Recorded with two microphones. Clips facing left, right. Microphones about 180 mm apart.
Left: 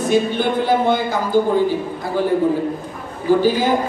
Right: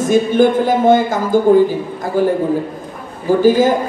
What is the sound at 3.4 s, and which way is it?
Speech, 45° right (ahead or behind).